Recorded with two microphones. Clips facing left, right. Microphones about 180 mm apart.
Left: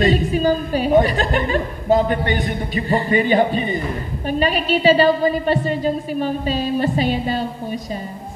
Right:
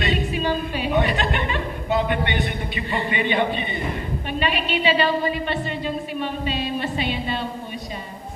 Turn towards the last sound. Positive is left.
turn(degrees=40)  # may be behind; listen again after turning